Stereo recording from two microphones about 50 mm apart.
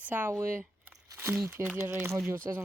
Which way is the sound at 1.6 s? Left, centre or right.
Right.